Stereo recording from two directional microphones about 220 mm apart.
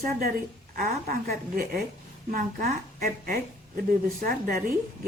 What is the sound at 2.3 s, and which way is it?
A woman's voice, 40° right (ahead or behind).